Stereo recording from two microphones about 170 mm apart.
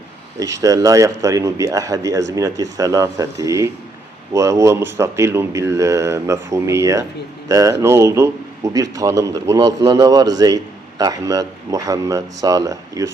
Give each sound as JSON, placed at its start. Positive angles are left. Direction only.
{"t": 0.3, "sound": "a man's voice", "side_deg": -20}